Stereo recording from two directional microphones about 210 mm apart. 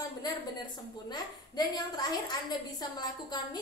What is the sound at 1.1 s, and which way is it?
A woman's voice, 20° left (ahead or behind).